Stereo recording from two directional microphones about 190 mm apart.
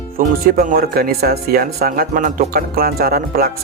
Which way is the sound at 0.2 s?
50° right (ahead or behind).